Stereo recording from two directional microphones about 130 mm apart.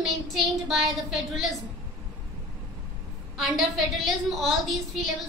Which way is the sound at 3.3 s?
Centre (ahead or behind).